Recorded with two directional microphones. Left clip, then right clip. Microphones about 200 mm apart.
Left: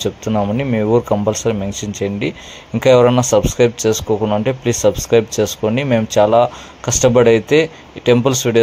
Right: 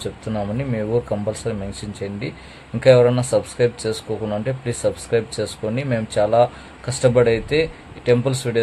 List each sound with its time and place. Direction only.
0.0 s speech: 25° left (ahead or behind)